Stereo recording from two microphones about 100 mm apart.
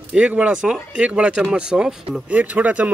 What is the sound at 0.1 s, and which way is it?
Speech, 10° right (ahead or behind).